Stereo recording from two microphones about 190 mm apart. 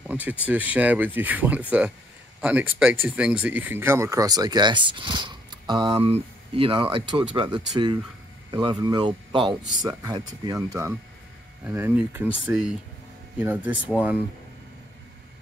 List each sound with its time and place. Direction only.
0.0 s speech: 10° right (ahead or behind)